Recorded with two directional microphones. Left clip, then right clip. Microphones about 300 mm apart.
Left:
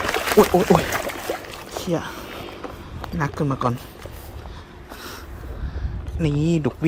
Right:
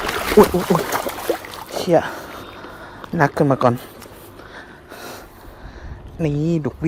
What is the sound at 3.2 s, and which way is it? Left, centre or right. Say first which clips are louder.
Speech: right 8 dB; centre.